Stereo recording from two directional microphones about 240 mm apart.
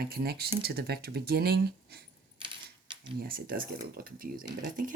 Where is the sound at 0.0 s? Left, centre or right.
Right.